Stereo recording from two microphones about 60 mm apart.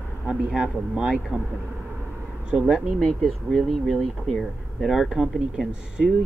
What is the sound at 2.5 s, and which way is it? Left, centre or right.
Speech, centre.